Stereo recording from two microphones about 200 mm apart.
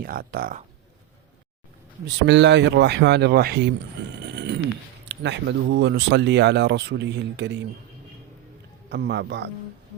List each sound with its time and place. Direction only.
0.0 s speech: 45° right (ahead or behind)
2.0 s speech: 60° right (ahead or behind)
4.3 s a sound: 60° right (ahead or behind)
5.0 s speech: 60° right (ahead or behind)
8.9 s speech: 55° right (ahead or behind)